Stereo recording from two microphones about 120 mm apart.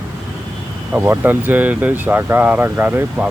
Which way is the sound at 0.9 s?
15° right (ahead or behind).